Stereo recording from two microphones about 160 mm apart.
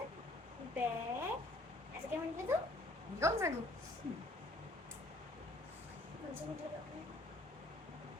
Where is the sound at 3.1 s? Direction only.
15° right (ahead or behind).